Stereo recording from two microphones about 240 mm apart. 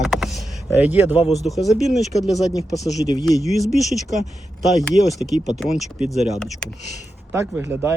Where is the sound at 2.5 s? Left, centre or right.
Centre.